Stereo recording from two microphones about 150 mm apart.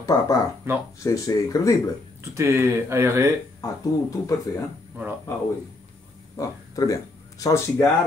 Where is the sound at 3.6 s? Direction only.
20° left (ahead or behind).